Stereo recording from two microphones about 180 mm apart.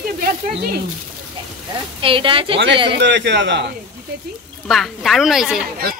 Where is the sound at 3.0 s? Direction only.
75° right (ahead or behind).